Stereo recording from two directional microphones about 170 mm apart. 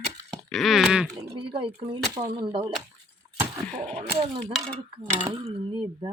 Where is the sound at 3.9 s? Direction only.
35° right (ahead or behind).